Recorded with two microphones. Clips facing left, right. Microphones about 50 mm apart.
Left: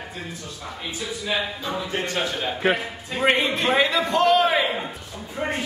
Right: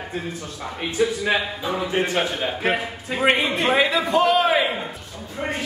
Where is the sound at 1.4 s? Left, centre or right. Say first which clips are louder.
Right 3 dB; centre.